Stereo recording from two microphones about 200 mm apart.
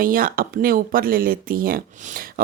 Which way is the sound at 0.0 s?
45° right (ahead or behind).